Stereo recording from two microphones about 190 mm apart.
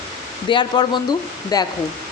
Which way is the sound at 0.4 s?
25° left (ahead or behind).